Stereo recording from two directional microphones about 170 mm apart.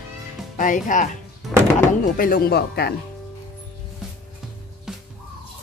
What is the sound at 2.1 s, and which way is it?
Speech, 60° left (ahead or behind).